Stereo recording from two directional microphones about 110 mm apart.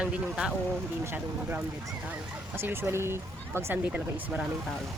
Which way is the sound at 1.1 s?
25° right (ahead or behind).